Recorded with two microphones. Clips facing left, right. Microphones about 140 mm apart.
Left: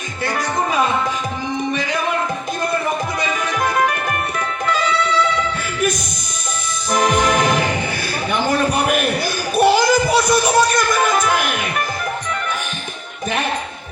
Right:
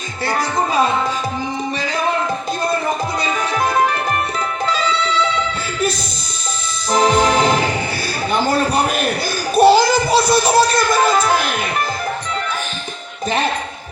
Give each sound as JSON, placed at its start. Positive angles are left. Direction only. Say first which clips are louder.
{"t": 0.3, "sound": "music", "louder": "right 2 dB", "side_deg": -35}
{"t": 6.9, "sound": "music", "louder": "right 2 dB", "side_deg": -35}
{"t": 8.3, "sound": "a sound", "louder": "right 1 dB", "side_deg": -35}